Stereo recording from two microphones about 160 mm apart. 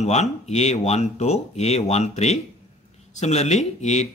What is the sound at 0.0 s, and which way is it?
Speech, 45° left (ahead or behind).